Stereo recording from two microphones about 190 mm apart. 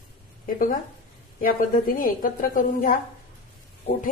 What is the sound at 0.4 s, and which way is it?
Speech, 45° left (ahead or behind).